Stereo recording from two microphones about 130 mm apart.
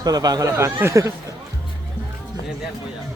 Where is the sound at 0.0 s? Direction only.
30° right (ahead or behind).